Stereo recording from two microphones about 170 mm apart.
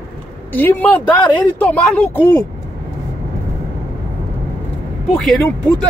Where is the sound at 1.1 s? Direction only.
25° left (ahead or behind).